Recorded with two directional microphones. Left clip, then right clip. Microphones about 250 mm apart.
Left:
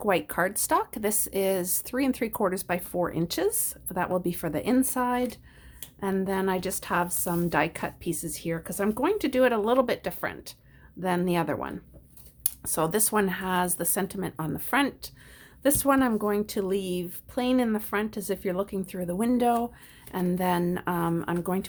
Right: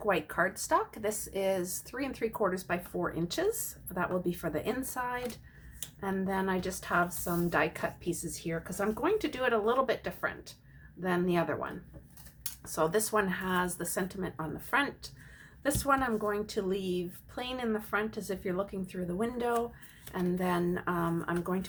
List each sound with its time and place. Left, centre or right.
0.0 s speech: left